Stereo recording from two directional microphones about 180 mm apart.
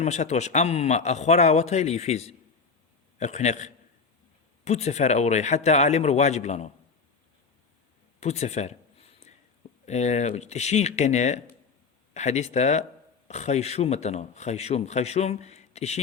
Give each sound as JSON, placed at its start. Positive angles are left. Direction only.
{"t": 0.0, "sound": "speech", "side_deg": 40}
{"t": 8.2, "sound": "a sound", "side_deg": 40}
{"t": 9.8, "sound": "speech", "side_deg": 40}